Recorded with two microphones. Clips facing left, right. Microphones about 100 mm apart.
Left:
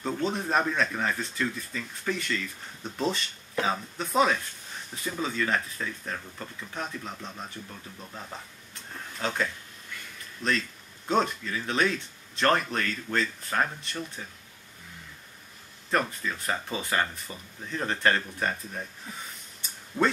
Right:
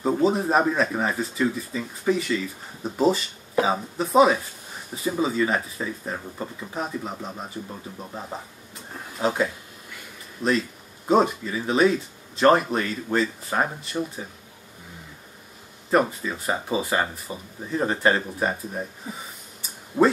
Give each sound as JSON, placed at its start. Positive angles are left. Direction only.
{"t": 0.2, "sound": "speech", "side_deg": -5}
{"t": 6.7, "sound": "speech", "side_deg": -5}
{"t": 7.6, "sound": "speech", "side_deg": -20}
{"t": 9.0, "sound": "speech", "side_deg": -10}
{"t": 15.9, "sound": "speech", "side_deg": -5}
{"t": 19.1, "sound": "a sound", "side_deg": -5}